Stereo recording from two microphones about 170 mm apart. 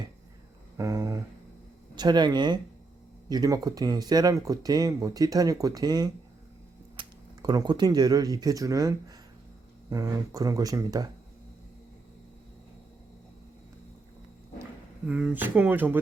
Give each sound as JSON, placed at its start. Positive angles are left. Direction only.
{"t": 0.8, "sound": "speech", "side_deg": -20}
{"t": 14.6, "sound": "speech", "side_deg": -5}